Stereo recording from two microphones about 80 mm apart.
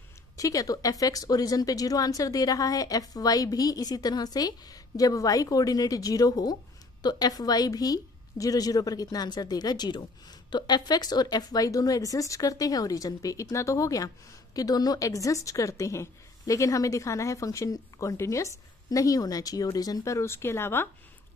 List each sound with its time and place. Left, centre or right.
0.4 s speech: left
20.2 s speech: left